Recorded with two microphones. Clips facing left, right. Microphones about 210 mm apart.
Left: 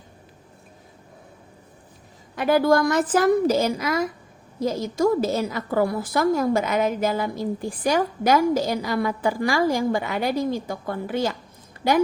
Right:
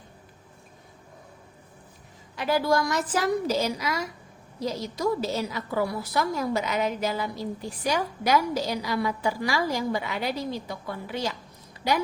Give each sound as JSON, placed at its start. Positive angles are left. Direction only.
{"t": 2.3, "sound": "a woman's voice", "side_deg": 55}